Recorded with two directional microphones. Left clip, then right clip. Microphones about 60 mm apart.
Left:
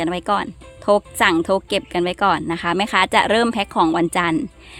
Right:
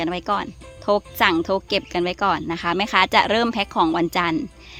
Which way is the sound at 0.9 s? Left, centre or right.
Left.